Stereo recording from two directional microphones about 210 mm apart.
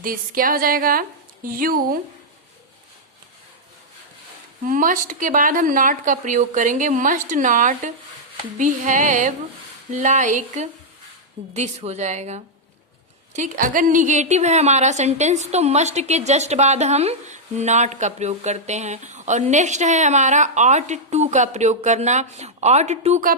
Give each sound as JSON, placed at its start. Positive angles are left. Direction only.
{"t": 0.0, "sound": "speech", "side_deg": -40}
{"t": 4.6, "sound": "a woman's voice", "side_deg": -40}